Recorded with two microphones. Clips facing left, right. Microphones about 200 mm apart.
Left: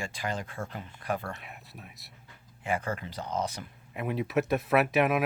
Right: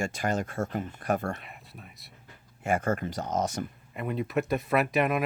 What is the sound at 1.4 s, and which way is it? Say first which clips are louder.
Speech: even; centre (ahead or behind).